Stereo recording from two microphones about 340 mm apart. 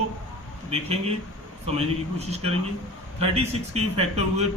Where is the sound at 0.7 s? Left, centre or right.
Centre.